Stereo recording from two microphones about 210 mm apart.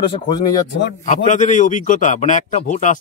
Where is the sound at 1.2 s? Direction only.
35° left (ahead or behind).